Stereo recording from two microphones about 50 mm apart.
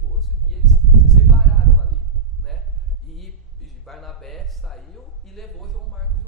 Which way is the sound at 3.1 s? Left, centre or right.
Centre.